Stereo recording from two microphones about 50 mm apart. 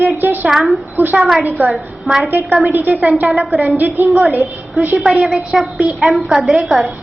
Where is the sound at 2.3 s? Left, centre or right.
Right.